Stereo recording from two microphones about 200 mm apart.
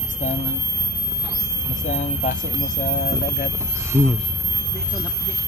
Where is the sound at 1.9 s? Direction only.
35° left (ahead or behind).